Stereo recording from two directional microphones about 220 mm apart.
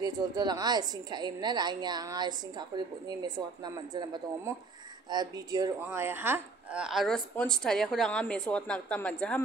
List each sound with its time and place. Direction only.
0.0 s a woman's voice: 20° right (ahead or behind); by 9.4 s 5° left (ahead or behind)